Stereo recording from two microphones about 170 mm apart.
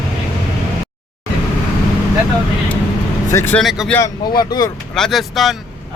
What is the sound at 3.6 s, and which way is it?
Speech, centre (ahead or behind).